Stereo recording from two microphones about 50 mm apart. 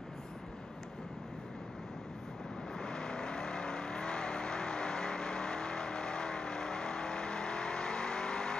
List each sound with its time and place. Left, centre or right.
2.8 s vehicle: centre